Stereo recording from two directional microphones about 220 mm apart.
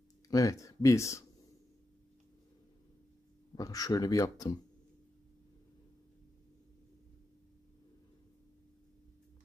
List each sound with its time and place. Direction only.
0.3 s speech: 15° left (ahead or behind)
3.5 s speech: 15° left (ahead or behind)